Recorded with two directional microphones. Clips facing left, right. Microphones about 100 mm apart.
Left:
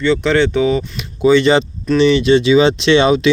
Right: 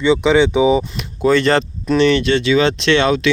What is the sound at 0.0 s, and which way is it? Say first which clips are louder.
Speech: right 1 dB; 10° right (ahead or behind).